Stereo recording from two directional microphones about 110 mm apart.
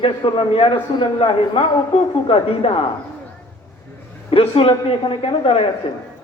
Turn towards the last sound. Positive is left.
turn(degrees=60)  # may be behind; listen again after turning